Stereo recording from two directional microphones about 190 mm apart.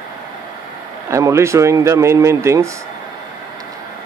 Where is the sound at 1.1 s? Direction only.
15° right (ahead or behind).